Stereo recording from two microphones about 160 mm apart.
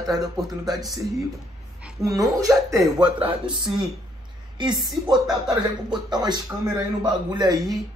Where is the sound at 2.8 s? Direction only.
5° right (ahead or behind).